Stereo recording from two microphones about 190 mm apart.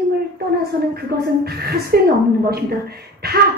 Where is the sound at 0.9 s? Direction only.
55° right (ahead or behind).